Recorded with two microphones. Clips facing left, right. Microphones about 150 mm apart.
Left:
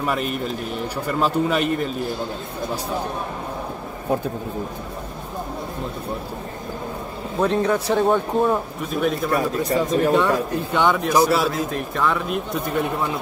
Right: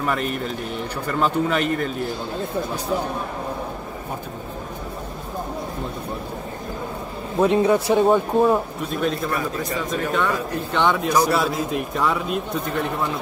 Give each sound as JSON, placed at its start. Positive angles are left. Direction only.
{"t": 1.0, "sound": "speech", "side_deg": 5}
{"t": 7.3, "sound": "speech", "side_deg": -10}
{"t": 9.3, "sound": "speech", "side_deg": 30}
{"t": 10.8, "sound": "speech", "side_deg": 0}